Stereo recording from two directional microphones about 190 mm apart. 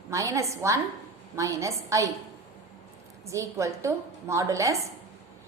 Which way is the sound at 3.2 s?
15° right (ahead or behind).